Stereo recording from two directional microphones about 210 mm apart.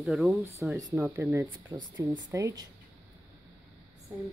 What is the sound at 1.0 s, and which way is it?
Speech, 15° right (ahead or behind).